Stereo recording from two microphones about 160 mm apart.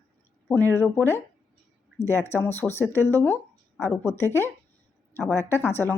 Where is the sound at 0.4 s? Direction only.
15° left (ahead or behind).